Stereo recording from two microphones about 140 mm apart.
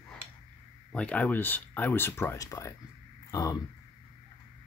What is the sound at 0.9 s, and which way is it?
Speech, 10° left (ahead or behind).